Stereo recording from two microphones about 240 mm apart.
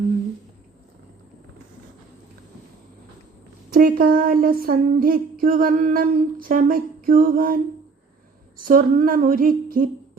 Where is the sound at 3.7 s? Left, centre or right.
Right.